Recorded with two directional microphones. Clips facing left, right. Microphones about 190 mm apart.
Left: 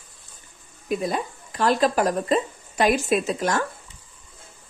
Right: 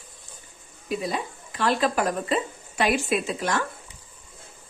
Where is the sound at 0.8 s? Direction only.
50° left (ahead or behind).